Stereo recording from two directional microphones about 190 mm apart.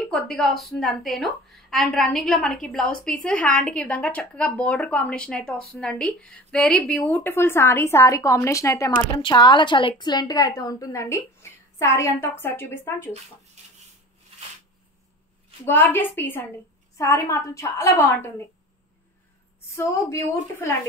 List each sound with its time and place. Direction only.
0.1 s a woman's voice: 5° left (ahead or behind)
15.6 s speech: 10° left (ahead or behind)
19.7 s speech: 15° left (ahead or behind)